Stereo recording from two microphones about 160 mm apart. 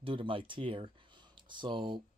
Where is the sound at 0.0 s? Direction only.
30° right (ahead or behind).